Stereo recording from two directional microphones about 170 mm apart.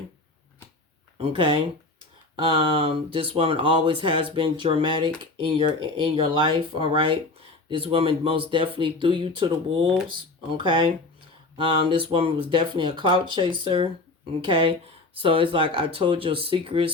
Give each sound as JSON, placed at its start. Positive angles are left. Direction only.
{"t": 1.2, "sound": "speech", "side_deg": -30}